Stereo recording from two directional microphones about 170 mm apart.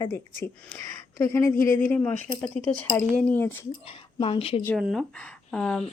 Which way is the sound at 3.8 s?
35° left (ahead or behind).